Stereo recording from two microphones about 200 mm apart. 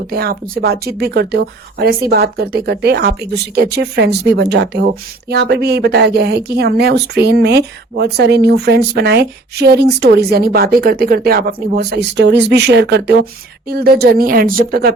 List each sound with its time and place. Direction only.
0.1 s speech: 50° right (ahead or behind)